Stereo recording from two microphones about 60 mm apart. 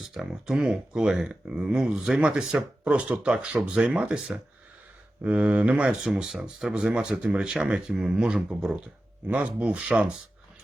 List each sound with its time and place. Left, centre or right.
0.1 s speech: centre
5.2 s speech: right